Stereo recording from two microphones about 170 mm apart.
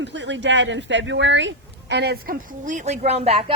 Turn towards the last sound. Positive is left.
turn(degrees=-40)  # may be behind; listen again after turning